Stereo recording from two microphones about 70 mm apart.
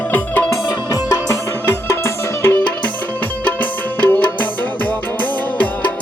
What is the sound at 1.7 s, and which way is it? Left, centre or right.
Music, left.